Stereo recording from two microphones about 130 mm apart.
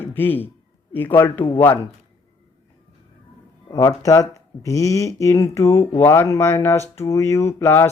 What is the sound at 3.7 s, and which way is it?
Speech, 25° left (ahead or behind).